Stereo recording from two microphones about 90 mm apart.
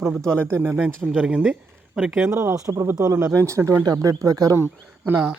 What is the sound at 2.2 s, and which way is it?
Speech, 30° right (ahead or behind).